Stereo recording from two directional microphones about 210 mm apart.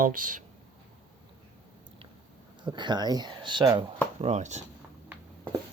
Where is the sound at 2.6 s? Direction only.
20° right (ahead or behind).